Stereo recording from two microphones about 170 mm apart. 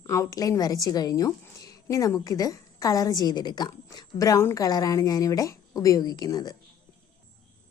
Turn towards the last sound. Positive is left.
turn(degrees=20)  # may be behind; listen again after turning